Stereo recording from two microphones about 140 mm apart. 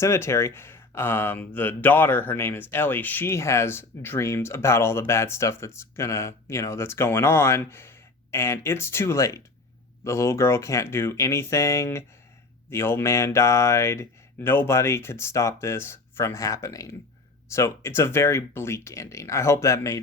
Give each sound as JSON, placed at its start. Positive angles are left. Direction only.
{"t": 0.0, "sound": "speech", "side_deg": 20}